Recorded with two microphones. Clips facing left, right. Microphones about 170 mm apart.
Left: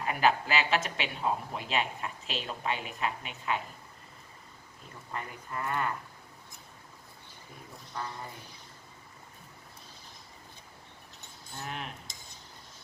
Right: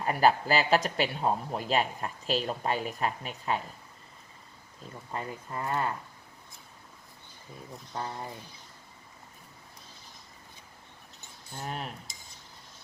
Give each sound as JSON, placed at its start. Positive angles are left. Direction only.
{"t": 0.0, "sound": "speech", "side_deg": -40}
{"t": 5.1, "sound": "speech", "side_deg": -30}
{"t": 7.9, "sound": "speech", "side_deg": -25}
{"t": 11.5, "sound": "speech", "side_deg": -35}